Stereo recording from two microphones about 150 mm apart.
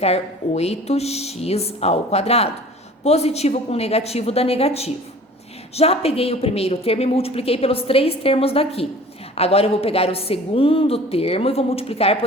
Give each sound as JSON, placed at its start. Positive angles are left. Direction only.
{"t": 0.0, "sound": "a woman's voice", "side_deg": 45}